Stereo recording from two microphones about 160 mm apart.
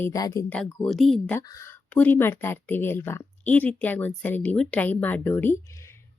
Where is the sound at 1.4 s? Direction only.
20° left (ahead or behind).